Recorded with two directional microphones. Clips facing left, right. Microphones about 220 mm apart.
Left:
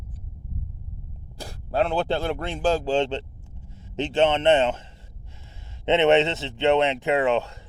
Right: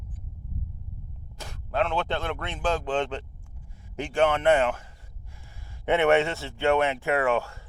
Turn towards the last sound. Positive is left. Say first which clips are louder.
# left 3 dB
turn(degrees=20)  # may be behind; listen again after turning